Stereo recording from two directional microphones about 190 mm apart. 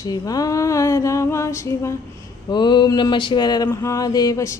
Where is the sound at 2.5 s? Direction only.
25° left (ahead or behind).